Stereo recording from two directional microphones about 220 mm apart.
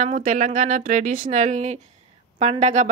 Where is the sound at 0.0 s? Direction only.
35° right (ahead or behind).